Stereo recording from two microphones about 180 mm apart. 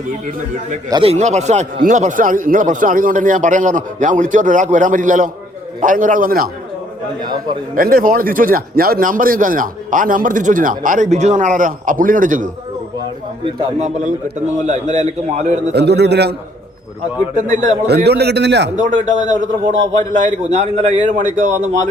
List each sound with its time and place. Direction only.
0.9 s speech: 25° right (ahead or behind)
1.1 s speech: 40° right (ahead or behind)
7.8 s speech: 55° right (ahead or behind)
13.4 s speech: 25° right (ahead or behind)
14.7 s a man's voice: 40° right (ahead or behind)
15.7 s a man's voice: 65° right (ahead or behind)
17.3 s speech: 45° right (ahead or behind)
17.8 s a man's voice: 65° right (ahead or behind)
18.9 s a man's voice: 45° right (ahead or behind)